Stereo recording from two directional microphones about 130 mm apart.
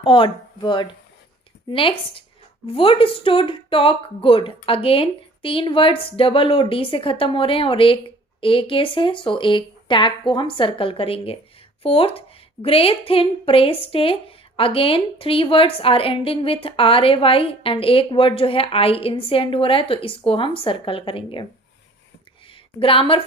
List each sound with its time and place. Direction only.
0.0 s a woman's voice: 40° left (ahead or behind)
22.8 s a woman's voice: 45° left (ahead or behind)